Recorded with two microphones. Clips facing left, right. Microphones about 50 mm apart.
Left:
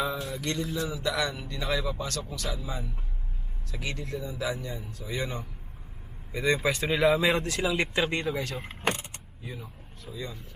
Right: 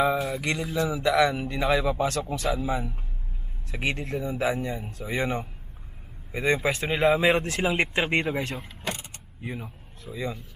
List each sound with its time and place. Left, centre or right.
0.2 s a sound: centre
0.4 s speech: centre
0.8 s a man's voice: right
6.3 s speech: right
8.6 s vehicle: left
9.4 s speech: right
10.1 s a man's voice: right